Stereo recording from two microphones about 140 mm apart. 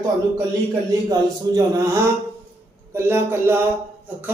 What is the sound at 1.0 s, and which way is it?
Speech, 25° right (ahead or behind).